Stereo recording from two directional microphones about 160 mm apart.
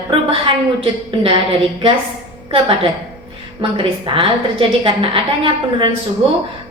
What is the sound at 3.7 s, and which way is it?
A woman's voice, 35° right (ahead or behind).